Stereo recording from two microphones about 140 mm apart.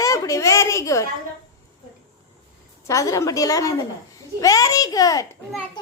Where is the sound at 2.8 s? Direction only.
20° left (ahead or behind).